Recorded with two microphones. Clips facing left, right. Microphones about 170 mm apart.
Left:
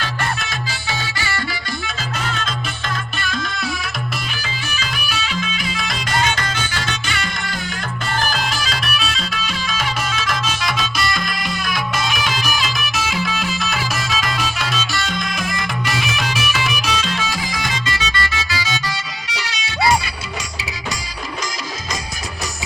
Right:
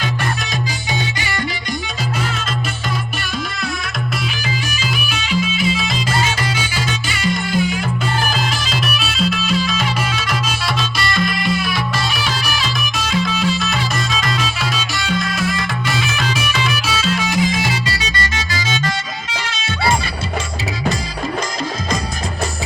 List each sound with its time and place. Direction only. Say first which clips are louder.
4.8 s music: right 3 dB; 10° right (ahead or behind)
16.0 s music: right 2 dB; 10° left (ahead or behind)
16.8 s music: right 3 dB; 5° right (ahead or behind)
17.2 s music: right 7 dB; 20° right (ahead or behind); by 18.9 s 45° right (ahead or behind)